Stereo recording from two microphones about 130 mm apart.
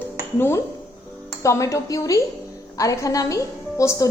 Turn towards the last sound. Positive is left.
turn(degrees=20)  # may be behind; listen again after turning